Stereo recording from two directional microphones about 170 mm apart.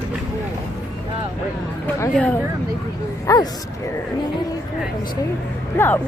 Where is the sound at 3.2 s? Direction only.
20° left (ahead or behind).